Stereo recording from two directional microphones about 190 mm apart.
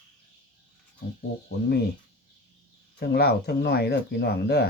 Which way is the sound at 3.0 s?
55° left (ahead or behind).